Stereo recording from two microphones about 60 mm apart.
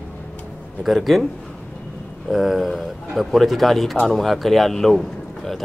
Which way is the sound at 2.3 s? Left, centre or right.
Centre.